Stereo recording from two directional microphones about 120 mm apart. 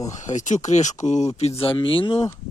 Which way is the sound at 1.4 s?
60° left (ahead or behind).